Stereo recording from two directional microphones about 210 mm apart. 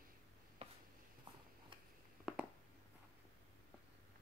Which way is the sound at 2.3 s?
5° right (ahead or behind).